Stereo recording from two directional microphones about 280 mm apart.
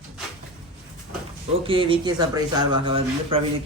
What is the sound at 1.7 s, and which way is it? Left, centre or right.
A man's voice, centre.